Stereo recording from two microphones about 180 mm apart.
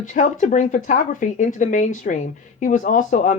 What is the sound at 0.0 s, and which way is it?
Speech, 45° left (ahead or behind).